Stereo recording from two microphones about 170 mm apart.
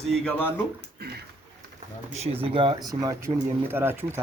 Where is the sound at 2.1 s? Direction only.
35° right (ahead or behind).